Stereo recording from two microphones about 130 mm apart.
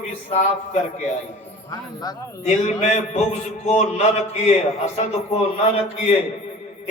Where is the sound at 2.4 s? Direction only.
55° left (ahead or behind).